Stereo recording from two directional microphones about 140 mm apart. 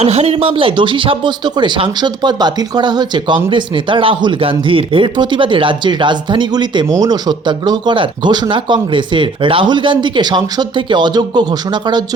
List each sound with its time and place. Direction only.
0.0 s speech: 45° right (ahead or behind); by 12.0 s 30° right (ahead or behind)